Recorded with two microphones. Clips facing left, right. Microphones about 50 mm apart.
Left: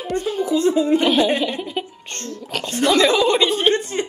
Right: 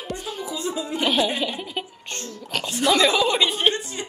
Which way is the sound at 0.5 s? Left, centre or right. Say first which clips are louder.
Left 12 dB; left.